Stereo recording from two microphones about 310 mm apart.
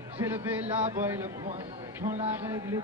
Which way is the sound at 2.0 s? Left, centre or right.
Centre.